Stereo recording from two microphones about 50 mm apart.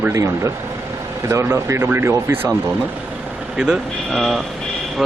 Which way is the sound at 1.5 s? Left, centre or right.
Right.